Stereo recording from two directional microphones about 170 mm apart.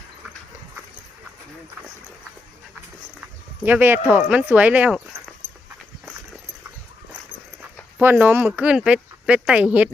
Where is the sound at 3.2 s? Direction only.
10° right (ahead or behind).